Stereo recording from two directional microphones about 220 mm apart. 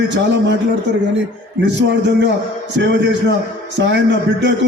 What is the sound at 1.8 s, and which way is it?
Speech, 50° right (ahead or behind).